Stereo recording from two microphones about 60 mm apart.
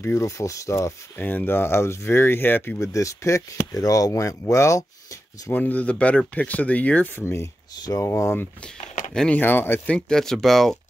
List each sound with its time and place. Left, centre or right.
0.0 s speech: left
1.1 s speech: left
2.8 s speech: left
5.5 s speech: left
7.2 s speech: left
8.6 s a sound: centre
9.3 s speech: left
9.8 s speech: centre